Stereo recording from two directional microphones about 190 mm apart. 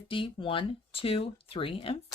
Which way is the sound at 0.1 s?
25° left (ahead or behind).